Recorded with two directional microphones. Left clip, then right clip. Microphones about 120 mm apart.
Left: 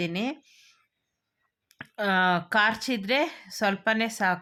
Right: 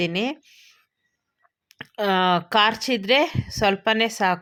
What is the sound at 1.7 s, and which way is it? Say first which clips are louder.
A woman's voice: right 3 dB; 25° right (ahead or behind).